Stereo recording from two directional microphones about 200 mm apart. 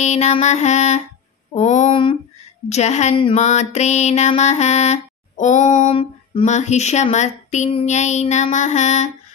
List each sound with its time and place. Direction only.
0.0 s mantra: 35° left (ahead or behind)